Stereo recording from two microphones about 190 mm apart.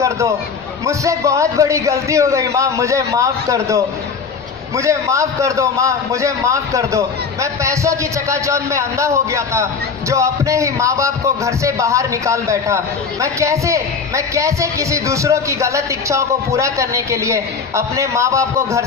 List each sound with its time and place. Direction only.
0.8 s a man's voice: 15° right (ahead or behind)